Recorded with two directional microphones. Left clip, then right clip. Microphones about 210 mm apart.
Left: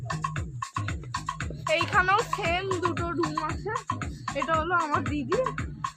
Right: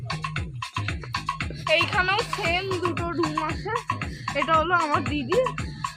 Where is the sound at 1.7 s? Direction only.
5° left (ahead or behind).